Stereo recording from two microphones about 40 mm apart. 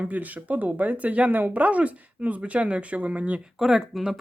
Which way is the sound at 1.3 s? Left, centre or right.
Right.